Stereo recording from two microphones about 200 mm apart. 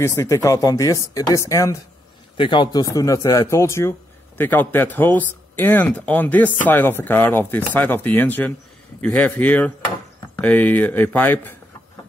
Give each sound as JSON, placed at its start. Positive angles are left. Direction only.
{"t": 0.0, "sound": "speech", "side_deg": 15}